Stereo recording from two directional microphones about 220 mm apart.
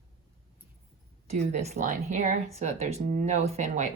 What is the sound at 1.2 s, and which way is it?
Speech, 30° right (ahead or behind).